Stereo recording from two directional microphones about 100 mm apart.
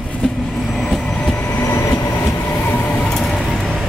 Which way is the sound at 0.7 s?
5° left (ahead or behind).